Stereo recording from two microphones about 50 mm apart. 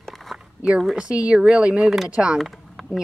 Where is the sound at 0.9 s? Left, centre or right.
Centre.